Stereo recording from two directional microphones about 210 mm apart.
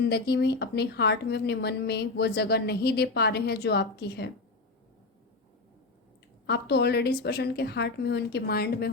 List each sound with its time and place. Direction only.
0.0 s speech: 50° left (ahead or behind)
6.5 s speech: 50° left (ahead or behind)